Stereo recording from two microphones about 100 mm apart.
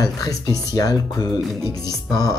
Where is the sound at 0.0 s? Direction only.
35° left (ahead or behind).